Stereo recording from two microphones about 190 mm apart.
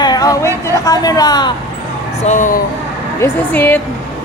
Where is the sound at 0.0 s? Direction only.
20° left (ahead or behind).